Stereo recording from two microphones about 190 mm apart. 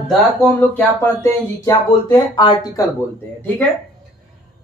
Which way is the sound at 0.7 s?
10° left (ahead or behind).